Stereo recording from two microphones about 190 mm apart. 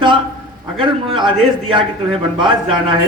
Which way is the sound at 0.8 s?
25° right (ahead or behind).